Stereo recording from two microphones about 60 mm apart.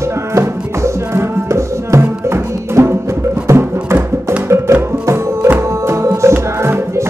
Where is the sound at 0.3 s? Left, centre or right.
Right.